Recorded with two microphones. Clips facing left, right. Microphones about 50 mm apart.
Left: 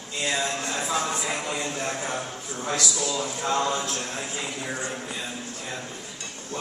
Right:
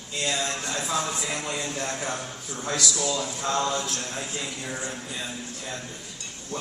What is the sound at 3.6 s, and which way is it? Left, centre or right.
Speech, centre.